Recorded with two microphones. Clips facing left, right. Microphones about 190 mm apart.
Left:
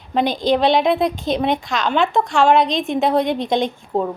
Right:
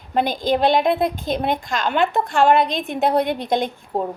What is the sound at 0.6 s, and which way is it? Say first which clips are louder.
Speech: even; 50° right (ahead or behind).